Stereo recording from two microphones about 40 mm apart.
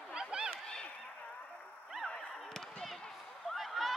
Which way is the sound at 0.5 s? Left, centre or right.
Centre.